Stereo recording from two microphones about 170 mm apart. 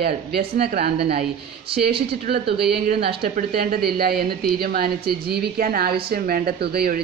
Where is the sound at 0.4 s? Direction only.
70° right (ahead or behind).